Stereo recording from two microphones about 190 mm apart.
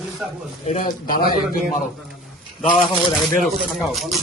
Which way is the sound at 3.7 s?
Centre (ahead or behind).